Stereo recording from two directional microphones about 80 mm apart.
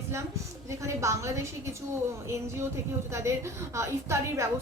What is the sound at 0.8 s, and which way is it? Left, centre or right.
A woman's voice, right.